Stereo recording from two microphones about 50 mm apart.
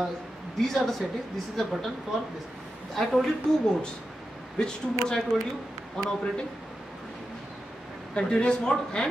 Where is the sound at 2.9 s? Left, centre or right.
Centre.